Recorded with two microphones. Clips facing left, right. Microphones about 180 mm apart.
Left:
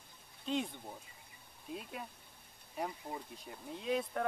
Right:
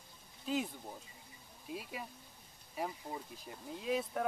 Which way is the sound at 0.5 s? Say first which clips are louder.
Even; 5° right (ahead or behind).